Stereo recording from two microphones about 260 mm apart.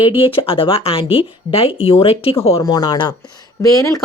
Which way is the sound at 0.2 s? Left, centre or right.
Left.